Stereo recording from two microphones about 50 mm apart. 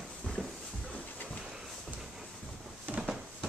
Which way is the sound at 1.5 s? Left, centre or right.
Centre.